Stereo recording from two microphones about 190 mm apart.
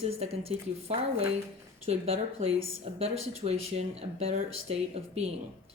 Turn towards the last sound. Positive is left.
turn(degrees=-35)  # may be behind; listen again after turning